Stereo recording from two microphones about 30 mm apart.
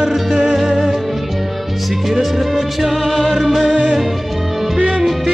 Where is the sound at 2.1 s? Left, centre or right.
Centre.